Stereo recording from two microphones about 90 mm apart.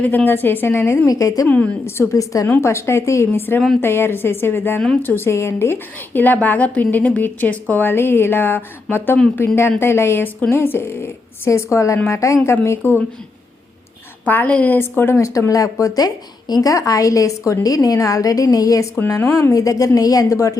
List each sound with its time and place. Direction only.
0.3 s a woman's voice: 20° left (ahead or behind)
1.0 s a woman's voice: 40° left (ahead or behind)
1.5 s speech: 15° left (ahead or behind)
2.0 s a woman's voice: 40° left (ahead or behind); by 9.1 s 20° left (ahead or behind)
9.1 s speech: 10° left (ahead or behind)
9.6 s a woman's voice: 25° left (ahead or behind)
14.3 s a woman's voice: 15° left (ahead or behind)
15.3 s a woman's voice: 35° left (ahead or behind)